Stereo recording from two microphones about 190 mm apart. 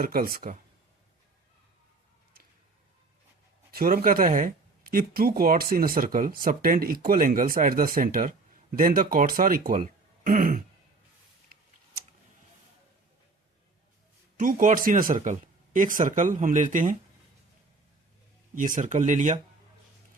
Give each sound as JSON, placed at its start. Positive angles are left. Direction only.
{"t": 0.0, "sound": "speech", "side_deg": -50}
{"t": 3.7, "sound": "speech", "side_deg": -50}
{"t": 14.3, "sound": "speech", "side_deg": -45}
{"t": 18.5, "sound": "speech", "side_deg": -45}